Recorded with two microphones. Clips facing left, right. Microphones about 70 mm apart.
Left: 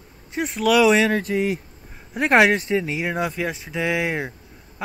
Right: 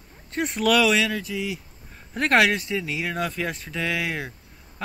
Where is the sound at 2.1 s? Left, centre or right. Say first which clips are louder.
Left 3 dB; centre.